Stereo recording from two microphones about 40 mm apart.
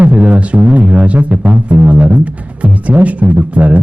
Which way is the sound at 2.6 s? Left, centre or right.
Right.